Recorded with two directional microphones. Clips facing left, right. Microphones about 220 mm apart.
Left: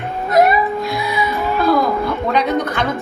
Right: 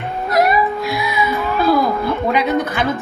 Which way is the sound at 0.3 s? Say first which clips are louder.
Left 2 dB; 25° left (ahead or behind).